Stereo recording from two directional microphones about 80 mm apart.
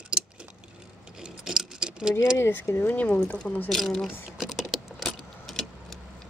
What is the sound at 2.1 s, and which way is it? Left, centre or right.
Speech, left.